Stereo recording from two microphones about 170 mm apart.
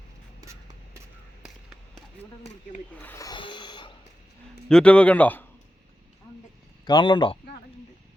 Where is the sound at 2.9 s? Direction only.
10° left (ahead or behind).